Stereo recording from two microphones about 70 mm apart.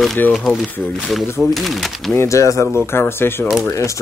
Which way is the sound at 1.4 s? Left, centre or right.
Centre.